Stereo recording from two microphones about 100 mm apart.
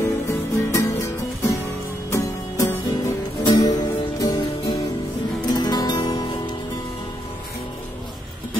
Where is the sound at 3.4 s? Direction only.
45° left (ahead or behind).